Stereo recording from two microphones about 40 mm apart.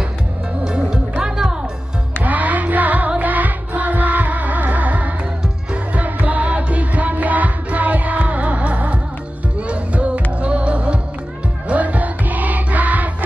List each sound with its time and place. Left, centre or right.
0.7 s music: right
1.2 s music: centre
2.2 s music: right